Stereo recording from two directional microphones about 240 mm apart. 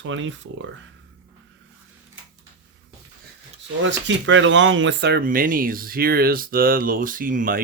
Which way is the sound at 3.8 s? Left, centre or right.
Right.